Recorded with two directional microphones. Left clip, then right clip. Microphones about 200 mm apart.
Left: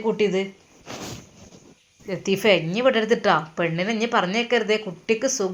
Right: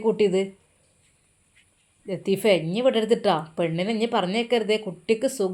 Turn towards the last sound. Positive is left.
turn(degrees=0)  # may be behind; listen again after turning